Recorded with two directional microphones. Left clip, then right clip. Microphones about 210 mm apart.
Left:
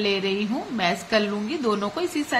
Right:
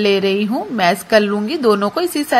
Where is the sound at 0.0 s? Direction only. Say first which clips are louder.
Right 9 dB; 30° right (ahead or behind).